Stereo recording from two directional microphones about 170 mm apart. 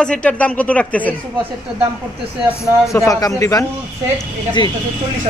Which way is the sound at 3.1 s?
20° left (ahead or behind).